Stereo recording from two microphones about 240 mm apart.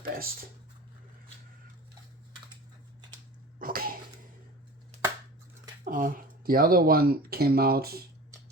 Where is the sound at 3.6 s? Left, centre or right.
Right.